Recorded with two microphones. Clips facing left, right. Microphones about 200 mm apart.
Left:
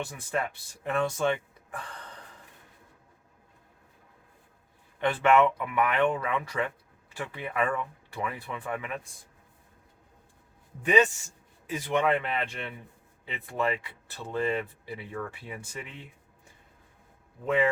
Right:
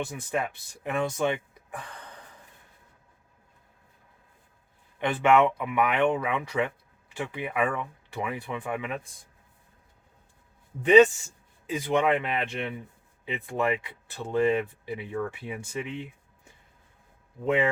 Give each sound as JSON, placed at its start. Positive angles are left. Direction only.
{"t": 0.1, "sound": "speech", "side_deg": -15}
{"t": 4.9, "sound": "speech", "side_deg": -15}
{"t": 11.7, "sound": "speech", "side_deg": -20}
{"t": 17.4, "sound": "speech", "side_deg": -20}